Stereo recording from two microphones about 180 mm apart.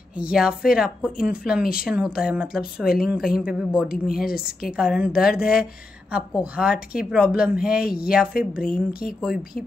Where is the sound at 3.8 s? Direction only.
55° left (ahead or behind).